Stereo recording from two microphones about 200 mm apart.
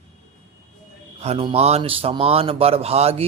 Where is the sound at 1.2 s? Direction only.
30° right (ahead or behind).